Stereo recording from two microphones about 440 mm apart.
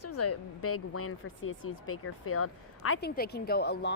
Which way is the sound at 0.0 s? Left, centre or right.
Left.